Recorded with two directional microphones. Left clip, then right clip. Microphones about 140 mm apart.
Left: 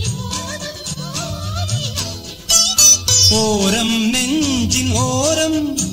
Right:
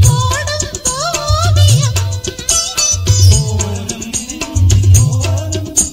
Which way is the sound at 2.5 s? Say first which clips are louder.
Left 4 dB; 40° right (ahead or behind).